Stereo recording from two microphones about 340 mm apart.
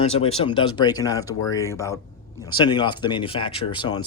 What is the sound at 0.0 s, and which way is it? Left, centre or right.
Speech, centre.